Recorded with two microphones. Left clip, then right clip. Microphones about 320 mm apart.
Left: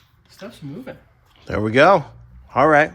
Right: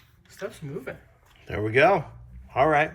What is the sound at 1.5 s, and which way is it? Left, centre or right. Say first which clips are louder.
Speech: left 6 dB; centre.